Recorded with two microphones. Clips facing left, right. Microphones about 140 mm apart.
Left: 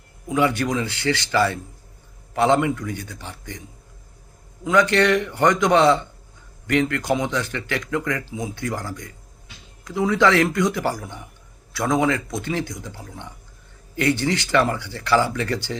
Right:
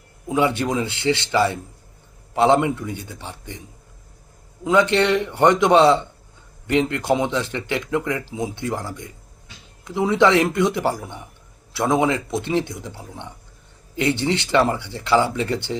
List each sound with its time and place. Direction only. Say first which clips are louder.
0.3 s speech: right 1 dB; 25° right (ahead or behind)
4.6 s speech: right 1 dB; 25° right (ahead or behind)